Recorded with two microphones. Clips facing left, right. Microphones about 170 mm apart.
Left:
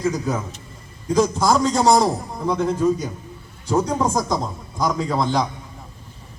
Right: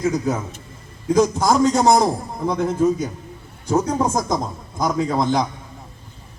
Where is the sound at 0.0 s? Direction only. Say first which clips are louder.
Right 2 dB; 20° right (ahead or behind).